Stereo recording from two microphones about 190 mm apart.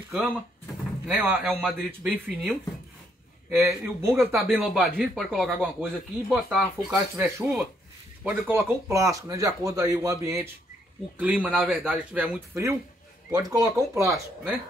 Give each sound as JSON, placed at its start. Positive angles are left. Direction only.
{"t": 0.1, "sound": "speech", "side_deg": 0}
{"t": 4.5, "sound": "speech", "side_deg": 0}
{"t": 6.9, "sound": "speech", "side_deg": -15}